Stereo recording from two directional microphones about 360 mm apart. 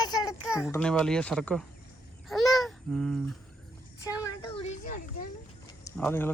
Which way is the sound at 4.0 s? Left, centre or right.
Centre.